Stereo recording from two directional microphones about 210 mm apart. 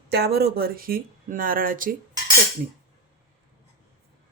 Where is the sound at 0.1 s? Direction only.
50° right (ahead or behind).